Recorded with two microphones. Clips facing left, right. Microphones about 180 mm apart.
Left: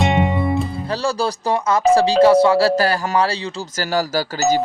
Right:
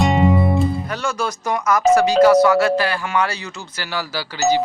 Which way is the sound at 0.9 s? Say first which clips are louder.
Left 3 dB; 35° left (ahead or behind).